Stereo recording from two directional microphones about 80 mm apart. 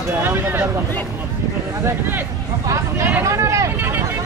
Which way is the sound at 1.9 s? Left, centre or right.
Right.